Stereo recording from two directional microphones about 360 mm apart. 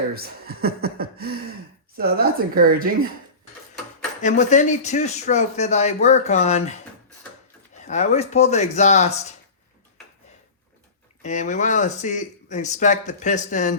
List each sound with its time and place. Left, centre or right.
0.1 s speech: right
4.2 s speech: centre
7.9 s speech: centre
11.2 s speech: centre